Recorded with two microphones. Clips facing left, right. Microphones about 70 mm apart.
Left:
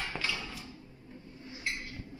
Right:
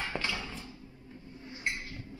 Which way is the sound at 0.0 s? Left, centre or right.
Centre.